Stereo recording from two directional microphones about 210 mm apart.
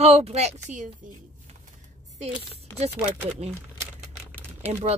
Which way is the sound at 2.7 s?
30° right (ahead or behind).